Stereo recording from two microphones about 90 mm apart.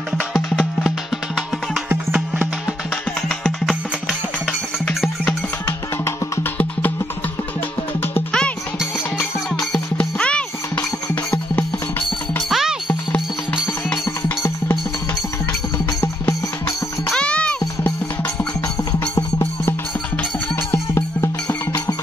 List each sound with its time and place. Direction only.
3.2 s music: 5° left (ahead or behind)
5.7 s music: 30° left (ahead or behind)
8.3 s music: 10° left (ahead or behind)
12.4 s music: centre (ahead or behind)
13.1 s music: 15° left (ahead or behind)
16.0 s music: 35° left (ahead or behind)
17.1 s music: 10° left (ahead or behind)
18.9 s music: 45° left (ahead or behind)
20.7 s music: 30° left (ahead or behind)